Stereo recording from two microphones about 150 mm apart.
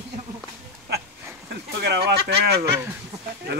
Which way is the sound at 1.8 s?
90° right.